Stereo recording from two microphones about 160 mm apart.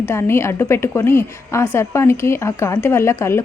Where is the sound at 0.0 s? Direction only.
15° left (ahead or behind).